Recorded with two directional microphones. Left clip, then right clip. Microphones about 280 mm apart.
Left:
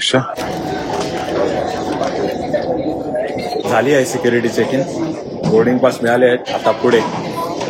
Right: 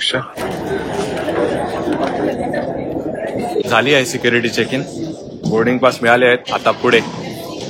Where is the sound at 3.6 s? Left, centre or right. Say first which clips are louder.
Even; centre.